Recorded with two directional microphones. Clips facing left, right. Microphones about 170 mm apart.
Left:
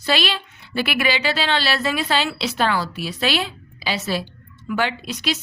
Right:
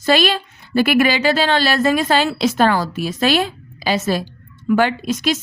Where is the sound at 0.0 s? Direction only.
45° right (ahead or behind).